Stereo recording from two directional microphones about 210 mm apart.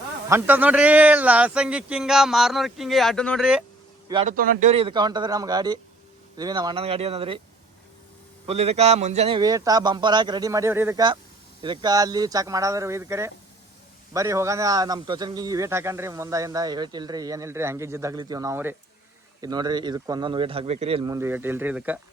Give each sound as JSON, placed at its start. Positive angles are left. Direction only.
{"t": 0.3, "sound": "a man's voice", "side_deg": -10}
{"t": 4.3, "sound": "a man's voice", "side_deg": -40}
{"t": 4.7, "sound": "a man's voice", "side_deg": -25}
{"t": 8.4, "sound": "a man's voice", "side_deg": -30}
{"t": 9.4, "sound": "a man's voice", "side_deg": -15}